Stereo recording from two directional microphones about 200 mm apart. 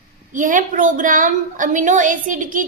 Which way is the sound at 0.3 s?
40° right (ahead or behind).